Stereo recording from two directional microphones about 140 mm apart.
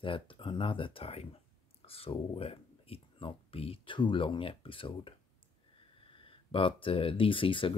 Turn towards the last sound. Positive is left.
turn(degrees=40)  # may be behind; listen again after turning